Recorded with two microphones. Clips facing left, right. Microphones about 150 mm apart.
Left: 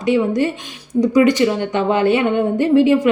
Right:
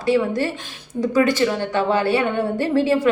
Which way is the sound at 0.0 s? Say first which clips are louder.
Left 3 dB; 20° left (ahead or behind).